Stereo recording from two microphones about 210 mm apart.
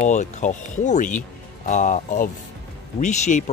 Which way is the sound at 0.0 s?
35° left (ahead or behind).